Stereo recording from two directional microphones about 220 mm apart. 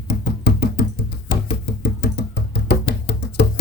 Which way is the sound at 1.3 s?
50° left (ahead or behind).